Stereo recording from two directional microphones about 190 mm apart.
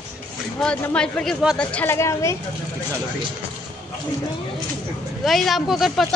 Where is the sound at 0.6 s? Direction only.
5° left (ahead or behind).